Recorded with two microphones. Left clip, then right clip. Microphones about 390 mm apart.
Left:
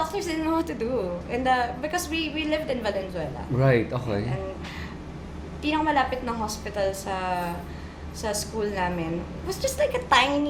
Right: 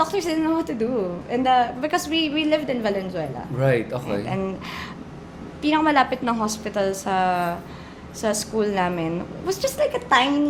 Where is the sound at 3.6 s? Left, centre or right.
Left.